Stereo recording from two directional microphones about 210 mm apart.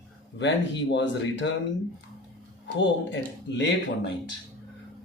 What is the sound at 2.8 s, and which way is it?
Speech, 60° left (ahead or behind).